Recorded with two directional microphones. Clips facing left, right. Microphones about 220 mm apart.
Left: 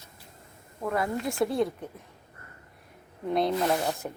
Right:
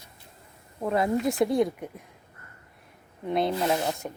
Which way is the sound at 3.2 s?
Centre (ahead or behind).